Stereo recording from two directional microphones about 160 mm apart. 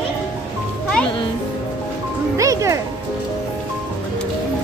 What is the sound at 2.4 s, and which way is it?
Music, 20° right (ahead or behind).